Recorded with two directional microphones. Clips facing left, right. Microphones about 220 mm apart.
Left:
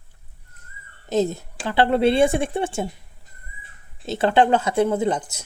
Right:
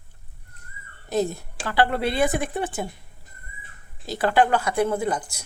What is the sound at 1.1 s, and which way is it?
Speech, 20° left (ahead or behind).